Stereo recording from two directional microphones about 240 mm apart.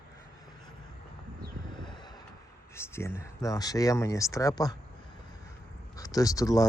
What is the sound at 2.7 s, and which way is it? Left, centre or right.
Speech, centre.